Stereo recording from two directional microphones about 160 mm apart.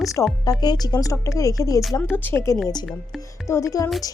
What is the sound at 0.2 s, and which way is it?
Speech, 15° left (ahead or behind).